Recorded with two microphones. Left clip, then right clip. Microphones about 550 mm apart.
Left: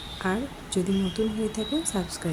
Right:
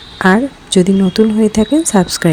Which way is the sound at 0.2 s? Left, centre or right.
Centre.